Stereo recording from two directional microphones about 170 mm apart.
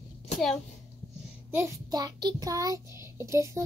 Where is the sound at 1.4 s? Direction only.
15° right (ahead or behind).